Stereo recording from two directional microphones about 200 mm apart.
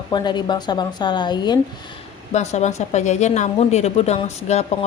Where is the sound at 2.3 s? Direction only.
35° left (ahead or behind).